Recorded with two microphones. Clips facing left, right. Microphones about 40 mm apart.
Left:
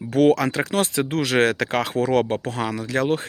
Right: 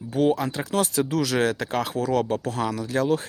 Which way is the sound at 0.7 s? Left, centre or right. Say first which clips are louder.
Right 3 dB; left.